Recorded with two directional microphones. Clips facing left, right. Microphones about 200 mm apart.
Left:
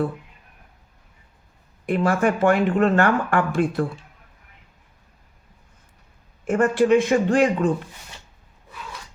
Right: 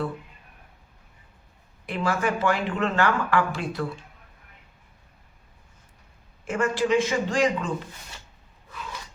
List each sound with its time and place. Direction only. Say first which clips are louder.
1.9 s speech: left 6 dB; 50° left (ahead or behind)
6.4 s speech: left 6 dB; 55° left (ahead or behind)